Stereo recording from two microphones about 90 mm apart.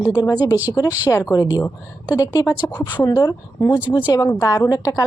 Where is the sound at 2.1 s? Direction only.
40° left (ahead or behind).